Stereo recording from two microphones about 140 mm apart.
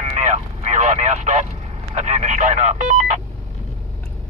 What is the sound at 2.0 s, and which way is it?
Speech, 55° right (ahead or behind).